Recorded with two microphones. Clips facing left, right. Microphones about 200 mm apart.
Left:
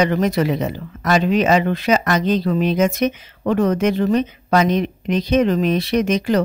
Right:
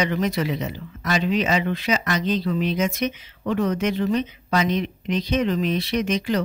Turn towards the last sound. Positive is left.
turn(degrees=45)  # may be behind; listen again after turning